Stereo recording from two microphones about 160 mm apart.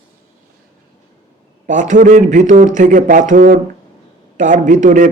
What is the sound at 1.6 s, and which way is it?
A man's voice, 50° right (ahead or behind).